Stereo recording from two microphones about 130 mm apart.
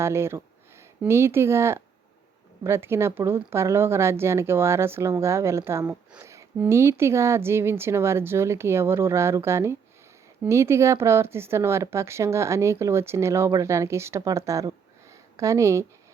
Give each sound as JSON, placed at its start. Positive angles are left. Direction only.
{"t": 0.0, "sound": "speech", "side_deg": -20}